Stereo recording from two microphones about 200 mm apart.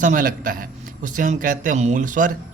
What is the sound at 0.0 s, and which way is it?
A man's voice, 40° right (ahead or behind).